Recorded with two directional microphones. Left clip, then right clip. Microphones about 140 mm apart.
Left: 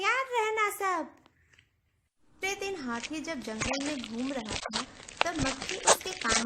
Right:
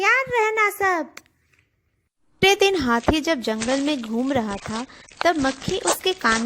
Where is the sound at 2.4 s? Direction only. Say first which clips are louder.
Right 17 dB; 65° right (ahead or behind).